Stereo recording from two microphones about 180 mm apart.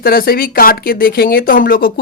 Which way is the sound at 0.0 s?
55° left (ahead or behind).